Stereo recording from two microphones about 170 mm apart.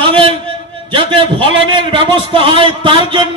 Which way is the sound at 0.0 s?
30° right (ahead or behind).